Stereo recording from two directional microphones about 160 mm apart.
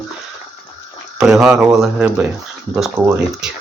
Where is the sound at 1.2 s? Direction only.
5° right (ahead or behind).